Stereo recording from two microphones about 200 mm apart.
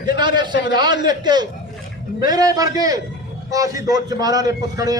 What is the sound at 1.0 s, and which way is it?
A man's voice, 20° right (ahead or behind).